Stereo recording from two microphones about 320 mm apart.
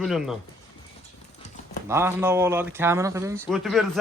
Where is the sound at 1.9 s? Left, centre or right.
Centre.